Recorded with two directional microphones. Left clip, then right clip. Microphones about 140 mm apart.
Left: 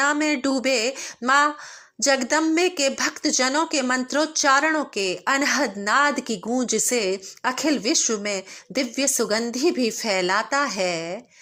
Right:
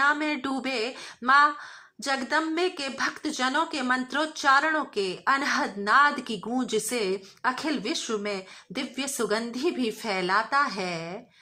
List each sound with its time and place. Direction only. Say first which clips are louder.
0.0 s a woman's voice: left 3 dB; 50° left (ahead or behind)